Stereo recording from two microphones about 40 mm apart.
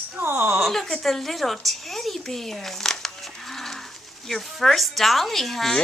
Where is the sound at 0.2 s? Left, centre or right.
Right.